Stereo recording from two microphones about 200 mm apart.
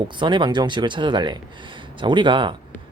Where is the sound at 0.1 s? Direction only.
25° right (ahead or behind).